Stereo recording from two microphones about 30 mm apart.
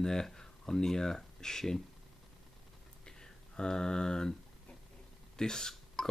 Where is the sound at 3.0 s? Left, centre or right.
Left.